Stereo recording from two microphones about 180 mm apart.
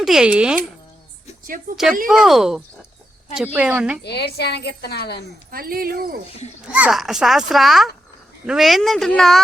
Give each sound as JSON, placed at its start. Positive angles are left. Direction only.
{"t": 0.0, "sound": "a child's voice", "side_deg": -5}
{"t": 1.7, "sound": "a child's voice", "side_deg": 0}
{"t": 4.0, "sound": "a woman's voice", "side_deg": 65}
{"t": 5.5, "sound": "speech", "side_deg": -55}
{"t": 6.7, "sound": "a child's voice", "side_deg": -5}